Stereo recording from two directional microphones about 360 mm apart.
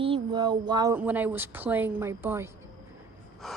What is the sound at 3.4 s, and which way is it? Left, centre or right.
Gasp, centre.